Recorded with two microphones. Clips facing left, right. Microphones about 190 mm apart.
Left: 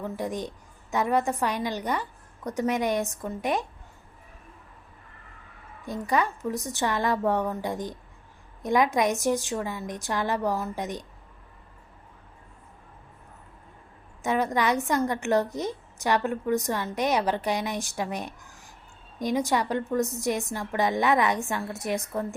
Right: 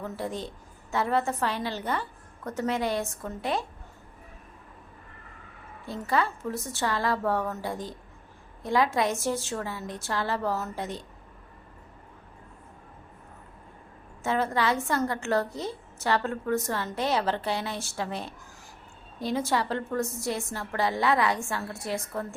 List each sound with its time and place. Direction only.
0.0 s a woman's voice: 15° left (ahead or behind)
5.8 s a woman's voice: 15° left (ahead or behind)
14.3 s a woman's voice: 15° left (ahead or behind)